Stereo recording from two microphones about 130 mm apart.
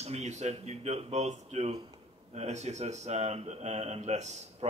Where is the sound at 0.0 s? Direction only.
60° right (ahead or behind).